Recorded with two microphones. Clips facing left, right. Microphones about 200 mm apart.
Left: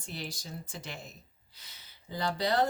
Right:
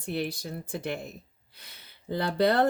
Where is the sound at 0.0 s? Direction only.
60° right (ahead or behind).